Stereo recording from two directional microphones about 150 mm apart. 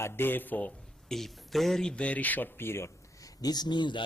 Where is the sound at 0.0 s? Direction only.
15° left (ahead or behind).